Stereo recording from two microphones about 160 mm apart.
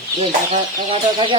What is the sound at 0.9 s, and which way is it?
Speech, 30° right (ahead or behind).